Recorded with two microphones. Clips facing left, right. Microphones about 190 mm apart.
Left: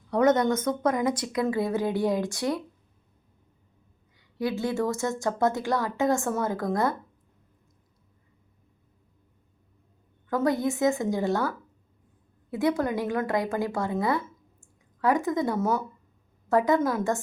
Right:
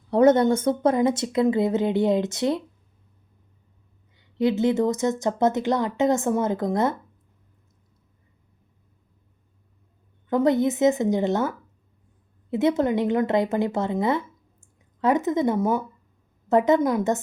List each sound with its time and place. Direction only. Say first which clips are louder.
0.1 s speech: right 5 dB; 30° right (ahead or behind)
4.4 s speech: right 6 dB; 20° right (ahead or behind)
10.2 s speech: right 5 dB; 20° right (ahead or behind)
14.6 s a sound: right 2 dB; 20° right (ahead or behind)
16.5 s speech: right 4 dB; 20° right (ahead or behind)